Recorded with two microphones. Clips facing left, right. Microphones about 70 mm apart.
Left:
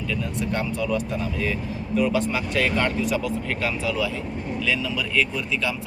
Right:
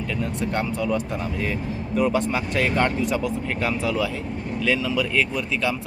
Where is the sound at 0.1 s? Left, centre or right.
Right.